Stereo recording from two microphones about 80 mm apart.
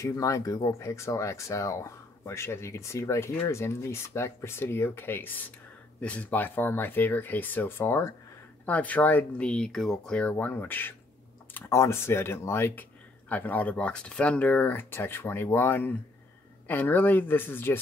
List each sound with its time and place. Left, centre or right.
0.0 s speech: left
8.6 s speech: centre
9.4 s speech: centre
10.2 s speech: left
11.7 s speech: left
13.3 s speech: left